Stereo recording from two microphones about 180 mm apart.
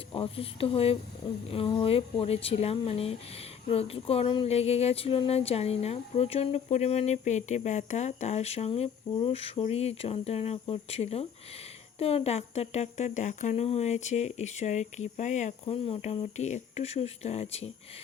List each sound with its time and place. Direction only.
0.1 s speech: 30° left (ahead or behind)